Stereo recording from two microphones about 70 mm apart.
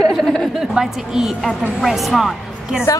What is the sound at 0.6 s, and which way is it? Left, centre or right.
A woman's voice, centre.